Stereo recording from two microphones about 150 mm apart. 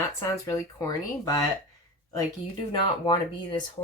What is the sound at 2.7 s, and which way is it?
Speech, 30° left (ahead or behind).